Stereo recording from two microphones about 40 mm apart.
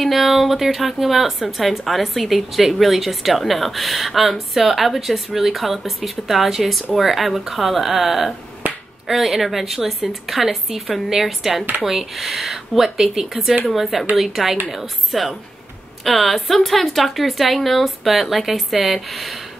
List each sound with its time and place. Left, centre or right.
0.0 s a woman's voice: centre
8.6 s finger snapping: right
9.0 s a woman's voice: centre